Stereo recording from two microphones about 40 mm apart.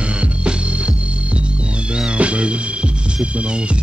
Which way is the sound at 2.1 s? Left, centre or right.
Right.